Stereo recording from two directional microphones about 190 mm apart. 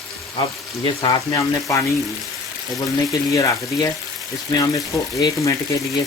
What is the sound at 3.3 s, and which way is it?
Speech, 20° left (ahead or behind).